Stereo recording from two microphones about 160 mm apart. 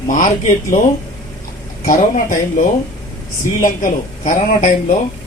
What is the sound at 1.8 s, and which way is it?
A woman's voice, 55° left (ahead or behind).